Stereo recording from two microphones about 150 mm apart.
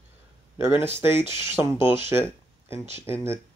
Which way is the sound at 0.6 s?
15° right (ahead or behind).